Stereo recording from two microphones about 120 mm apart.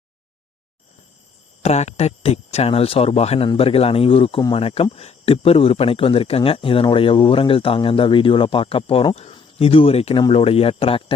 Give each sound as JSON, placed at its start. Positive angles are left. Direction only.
{"t": 1.6, "sound": "speech", "side_deg": 65}